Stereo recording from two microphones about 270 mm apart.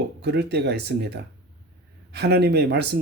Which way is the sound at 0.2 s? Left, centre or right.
Right.